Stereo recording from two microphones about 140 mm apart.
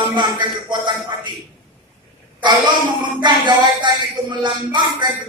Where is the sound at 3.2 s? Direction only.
30° right (ahead or behind).